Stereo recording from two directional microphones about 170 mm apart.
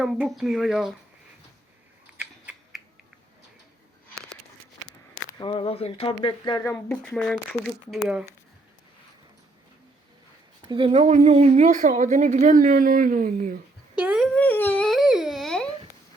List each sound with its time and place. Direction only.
0.0 s speech: centre (ahead or behind)
2.1 s a sound: 10° right (ahead or behind)
5.4 s speech: 30° left (ahead or behind)
6.7 s speech: 10° left (ahead or behind)
10.7 s speech: 30° right (ahead or behind); by 13.6 s 50° right (ahead or behind)
13.9 s speech: 5° right (ahead or behind)
14.3 s a sound: 10° left (ahead or behind)